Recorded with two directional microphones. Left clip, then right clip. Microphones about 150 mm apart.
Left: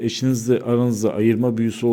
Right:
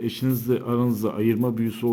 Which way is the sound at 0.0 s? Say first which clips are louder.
Left 4 dB; 25° left (ahead or behind).